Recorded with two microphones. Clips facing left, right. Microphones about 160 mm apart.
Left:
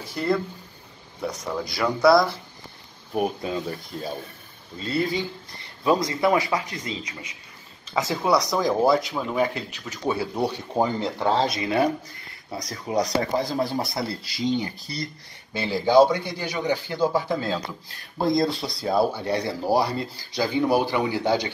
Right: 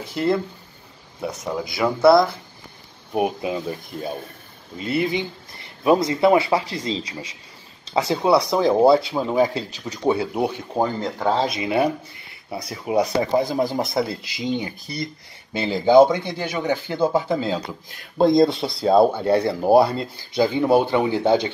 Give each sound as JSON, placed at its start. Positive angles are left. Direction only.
{"t": 0.0, "sound": "speech", "side_deg": -20}
{"t": 1.8, "sound": "speech", "side_deg": -5}
{"t": 10.7, "sound": "speech", "side_deg": 5}
{"t": 11.5, "sound": "speech", "side_deg": -20}